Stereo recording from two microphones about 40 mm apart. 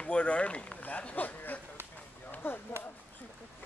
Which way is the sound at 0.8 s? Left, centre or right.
Left.